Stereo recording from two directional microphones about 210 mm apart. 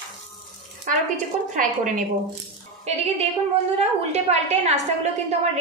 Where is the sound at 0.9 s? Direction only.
40° right (ahead or behind).